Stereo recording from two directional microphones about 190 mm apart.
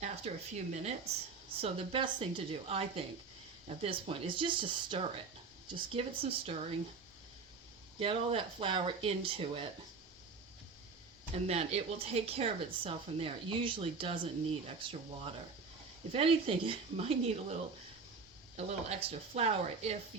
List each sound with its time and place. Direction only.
0.0 s a woman's voice: 35° right (ahead or behind)
7.9 s speech: 30° right (ahead or behind)
11.3 s speech: 35° right (ahead or behind)